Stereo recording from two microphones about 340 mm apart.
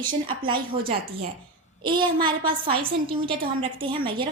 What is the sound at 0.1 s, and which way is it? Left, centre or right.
A woman's voice, centre.